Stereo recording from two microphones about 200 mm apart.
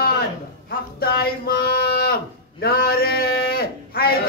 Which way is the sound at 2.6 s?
50° left (ahead or behind).